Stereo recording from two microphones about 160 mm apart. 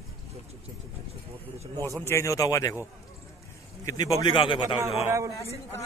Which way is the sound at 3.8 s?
20° left (ahead or behind).